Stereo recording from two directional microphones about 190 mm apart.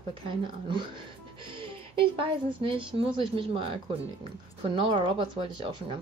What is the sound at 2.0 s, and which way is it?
A woman's voice, 30° right (ahead or behind).